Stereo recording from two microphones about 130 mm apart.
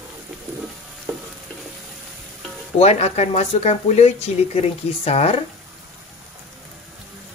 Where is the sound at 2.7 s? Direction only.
55° left (ahead or behind).